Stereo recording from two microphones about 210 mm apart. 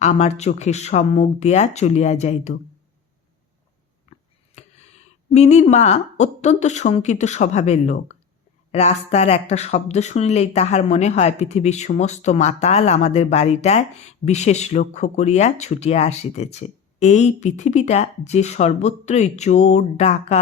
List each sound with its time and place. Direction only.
0.0 s speech: 30° left (ahead or behind)
4.6 s a sound: 30° left (ahead or behind)
5.3 s speech: 30° left (ahead or behind)